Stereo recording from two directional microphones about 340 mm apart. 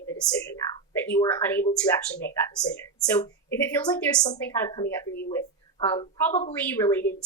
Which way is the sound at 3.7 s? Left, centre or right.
Centre.